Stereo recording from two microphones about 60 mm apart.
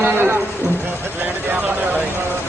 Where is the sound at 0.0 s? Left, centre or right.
Right.